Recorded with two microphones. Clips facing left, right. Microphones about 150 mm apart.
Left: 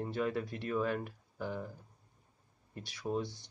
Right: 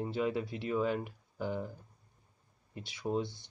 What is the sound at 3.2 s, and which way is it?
Speech, 10° left (ahead or behind).